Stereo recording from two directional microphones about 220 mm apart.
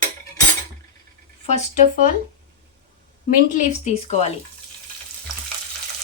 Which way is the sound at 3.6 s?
30° left (ahead or behind).